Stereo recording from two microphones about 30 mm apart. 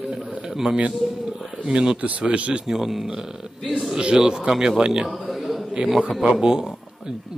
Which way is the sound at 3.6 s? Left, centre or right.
Centre.